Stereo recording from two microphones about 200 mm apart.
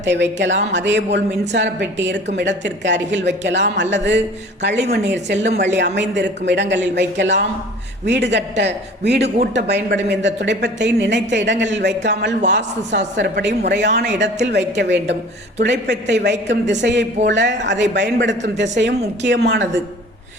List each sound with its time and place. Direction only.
0.0 s a woman's voice: 65° right (ahead or behind)